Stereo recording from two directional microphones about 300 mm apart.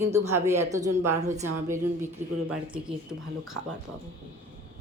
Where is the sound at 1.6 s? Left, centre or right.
Centre.